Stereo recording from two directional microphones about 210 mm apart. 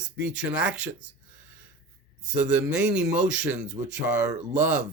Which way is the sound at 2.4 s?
5° right (ahead or behind).